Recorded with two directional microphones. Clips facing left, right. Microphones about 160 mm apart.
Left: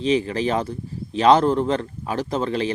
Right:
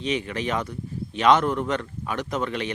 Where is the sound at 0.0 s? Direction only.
30° left (ahead or behind).